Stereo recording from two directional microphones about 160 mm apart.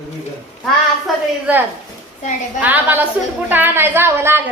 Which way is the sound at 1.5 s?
5° right (ahead or behind).